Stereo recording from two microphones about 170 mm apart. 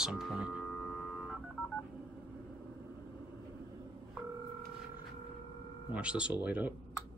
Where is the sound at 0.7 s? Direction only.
10° left (ahead or behind).